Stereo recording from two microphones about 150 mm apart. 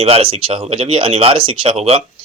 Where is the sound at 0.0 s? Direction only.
40° right (ahead or behind).